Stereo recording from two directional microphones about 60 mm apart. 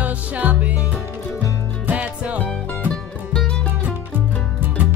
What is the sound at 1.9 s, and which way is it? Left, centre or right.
Music, right.